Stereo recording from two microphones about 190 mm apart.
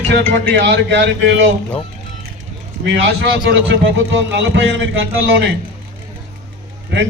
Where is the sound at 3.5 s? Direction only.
65° right (ahead or behind).